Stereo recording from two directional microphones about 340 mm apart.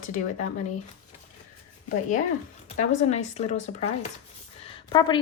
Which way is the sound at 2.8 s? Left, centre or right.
Centre.